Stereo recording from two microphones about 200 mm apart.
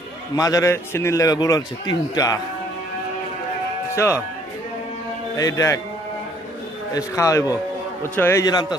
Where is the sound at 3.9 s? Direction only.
15° left (ahead or behind).